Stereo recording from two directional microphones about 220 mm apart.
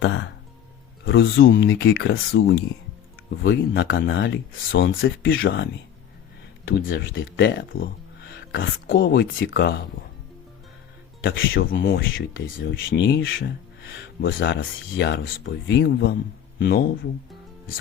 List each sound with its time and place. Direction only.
0.0 s speech: 60° left (ahead or behind)
1.5 s speech: 45° left (ahead or behind)
5.4 s speech: 50° left (ahead or behind)
6.7 s speech: 60° left (ahead or behind)
11.5 s speech: 40° left (ahead or behind)
11.9 s speech: 60° left (ahead or behind); by 16.9 s 45° left (ahead or behind)